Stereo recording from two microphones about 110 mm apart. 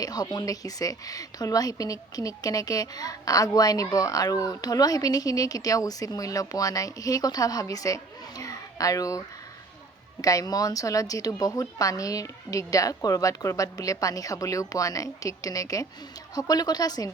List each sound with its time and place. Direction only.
0.0 s speech: 35° left (ahead or behind)